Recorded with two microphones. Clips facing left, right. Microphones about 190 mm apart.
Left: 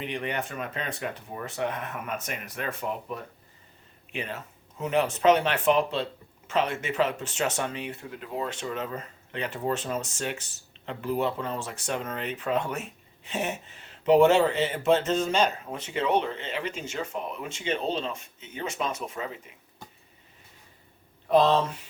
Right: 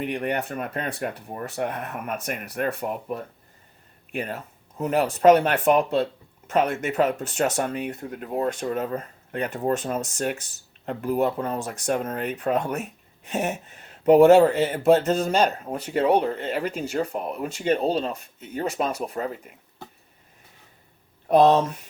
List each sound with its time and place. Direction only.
0.0 s speech: 55° right (ahead or behind)
4.1 s speech: 50° right (ahead or behind)
21.2 s speech: 50° right (ahead or behind)